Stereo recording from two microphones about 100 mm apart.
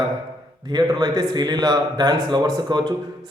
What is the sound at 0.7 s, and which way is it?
A man's voice, 45° right (ahead or behind).